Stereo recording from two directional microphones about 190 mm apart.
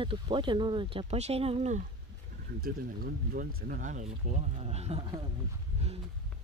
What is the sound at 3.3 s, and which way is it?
Speech, 50° right (ahead or behind).